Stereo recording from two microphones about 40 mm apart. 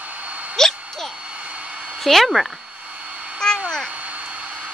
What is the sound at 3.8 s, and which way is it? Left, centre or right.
Hair dryer, right.